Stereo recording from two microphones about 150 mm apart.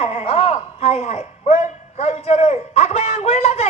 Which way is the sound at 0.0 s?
45° left (ahead or behind).